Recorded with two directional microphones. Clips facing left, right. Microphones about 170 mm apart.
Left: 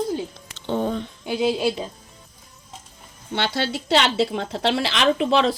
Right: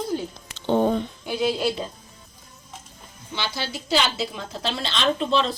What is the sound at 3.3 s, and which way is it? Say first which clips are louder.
A woman's voice: left 6 dB; 70° left (ahead or behind).